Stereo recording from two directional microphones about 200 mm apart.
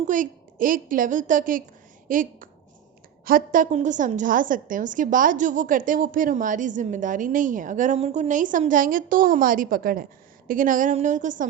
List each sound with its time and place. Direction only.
0.0 s a woman's voice: 40° right (ahead or behind)